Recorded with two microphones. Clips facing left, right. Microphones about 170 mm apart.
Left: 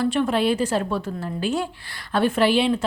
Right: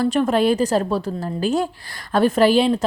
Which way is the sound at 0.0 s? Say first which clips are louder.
Right 3 dB; 40° right (ahead or behind).